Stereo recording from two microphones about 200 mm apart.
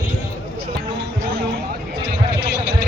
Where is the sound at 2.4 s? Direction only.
55° right (ahead or behind).